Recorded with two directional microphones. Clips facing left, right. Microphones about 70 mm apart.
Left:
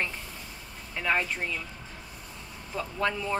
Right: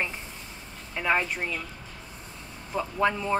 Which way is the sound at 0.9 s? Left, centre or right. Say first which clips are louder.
Right 2 dB; centre.